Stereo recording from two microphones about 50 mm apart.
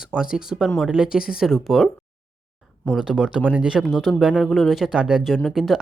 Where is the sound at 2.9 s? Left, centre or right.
Centre.